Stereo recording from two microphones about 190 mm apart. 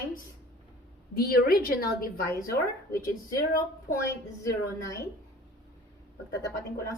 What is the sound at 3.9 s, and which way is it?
Speech, 45° left (ahead or behind).